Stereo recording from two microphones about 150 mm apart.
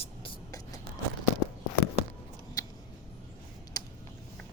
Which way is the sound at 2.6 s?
25° left (ahead or behind).